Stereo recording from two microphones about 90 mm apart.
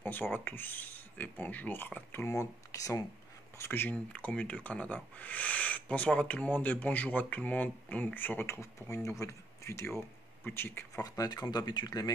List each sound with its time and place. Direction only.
0.0 s speech: 20° left (ahead or behind)
2.2 s speech: 40° left (ahead or behind)
3.5 s speech: 25° left (ahead or behind)
11.0 s speech: 40° left (ahead or behind)